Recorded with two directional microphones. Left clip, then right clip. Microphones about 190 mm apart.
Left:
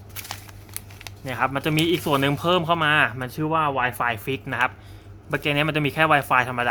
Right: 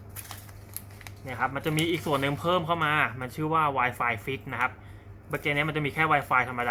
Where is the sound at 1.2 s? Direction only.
55° left (ahead or behind).